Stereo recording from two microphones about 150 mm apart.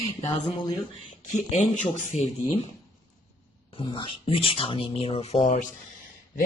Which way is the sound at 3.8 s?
35° left (ahead or behind).